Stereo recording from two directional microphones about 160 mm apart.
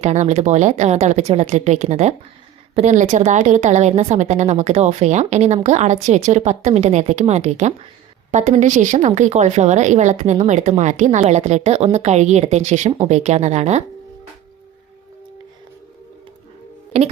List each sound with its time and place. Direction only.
0.0 s a woman's voice: 45° right (ahead or behind)
16.9 s speech: 40° right (ahead or behind)